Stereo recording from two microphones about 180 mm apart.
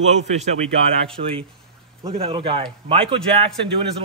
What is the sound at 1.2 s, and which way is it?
A man's voice, 30° right (ahead or behind).